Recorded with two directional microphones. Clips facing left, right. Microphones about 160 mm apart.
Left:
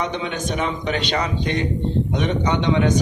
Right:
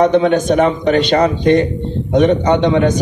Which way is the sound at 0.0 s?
50° right (ahead or behind).